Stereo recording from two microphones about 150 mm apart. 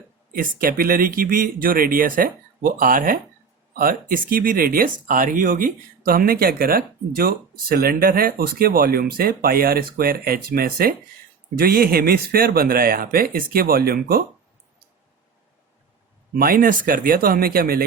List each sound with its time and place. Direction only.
0.3 s speech: 70° right (ahead or behind)
16.4 s speech: 70° right (ahead or behind)